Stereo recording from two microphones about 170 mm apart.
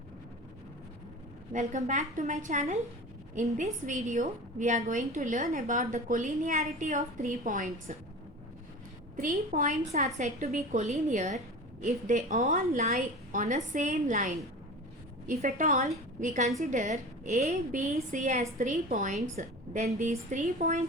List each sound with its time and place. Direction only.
1.5 s a woman's voice: 45° right (ahead or behind)
9.1 s a woman's voice: 50° right (ahead or behind)
15.3 s a woman's voice: 50° right (ahead or behind)